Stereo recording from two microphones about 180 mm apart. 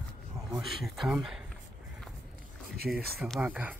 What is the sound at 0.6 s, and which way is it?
Speech, centre (ahead or behind).